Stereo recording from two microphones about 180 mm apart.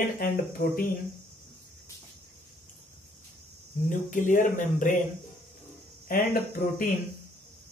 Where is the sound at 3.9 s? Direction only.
45° left (ahead or behind).